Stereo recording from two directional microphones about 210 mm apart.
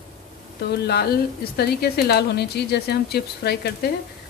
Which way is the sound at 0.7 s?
50° left (ahead or behind).